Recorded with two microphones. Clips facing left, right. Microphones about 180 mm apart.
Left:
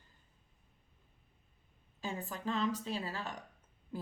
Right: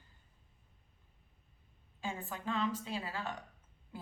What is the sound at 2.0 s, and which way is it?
Speech, 40° left (ahead or behind).